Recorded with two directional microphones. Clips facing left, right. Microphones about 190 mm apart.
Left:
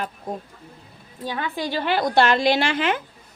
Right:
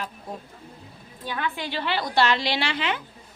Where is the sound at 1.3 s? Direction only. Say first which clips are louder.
Left 3 dB; 40° left (ahead or behind).